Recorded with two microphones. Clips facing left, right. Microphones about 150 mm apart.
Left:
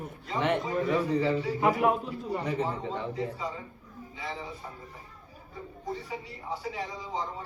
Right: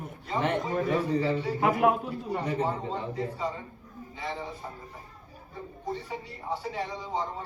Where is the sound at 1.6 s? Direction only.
50° right (ahead or behind).